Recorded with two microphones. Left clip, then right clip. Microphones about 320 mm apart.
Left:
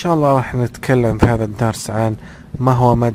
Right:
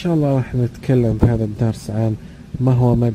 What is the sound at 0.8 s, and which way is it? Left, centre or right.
Speech, left.